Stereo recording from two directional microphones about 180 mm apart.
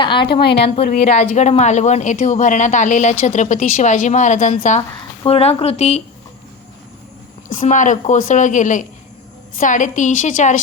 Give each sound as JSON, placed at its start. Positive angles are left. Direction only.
{"t": 0.0, "sound": "a woman's voice", "side_deg": 25}
{"t": 4.8, "sound": "speech", "side_deg": 30}
{"t": 7.5, "sound": "speech", "side_deg": 45}